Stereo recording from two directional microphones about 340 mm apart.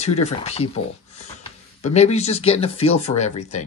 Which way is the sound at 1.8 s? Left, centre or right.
Centre.